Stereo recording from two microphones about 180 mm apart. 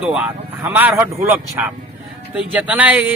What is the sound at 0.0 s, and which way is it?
A man's voice, 5° right (ahead or behind).